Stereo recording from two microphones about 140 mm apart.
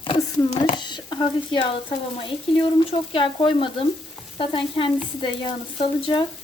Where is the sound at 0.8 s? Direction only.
30° left (ahead or behind).